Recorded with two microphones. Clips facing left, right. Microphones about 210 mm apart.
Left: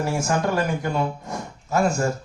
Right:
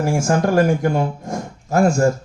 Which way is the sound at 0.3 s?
50° right (ahead or behind).